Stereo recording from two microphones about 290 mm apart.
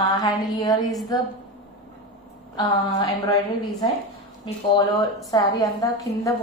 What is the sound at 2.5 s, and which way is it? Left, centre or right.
Speech, centre.